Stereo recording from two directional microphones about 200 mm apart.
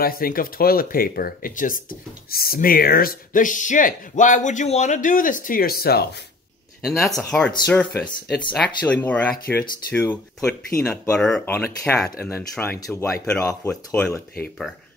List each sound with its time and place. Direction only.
0.0 s speech: 45° left (ahead or behind)
6.8 s speech: centre (ahead or behind); by 14.0 s 15° left (ahead or behind)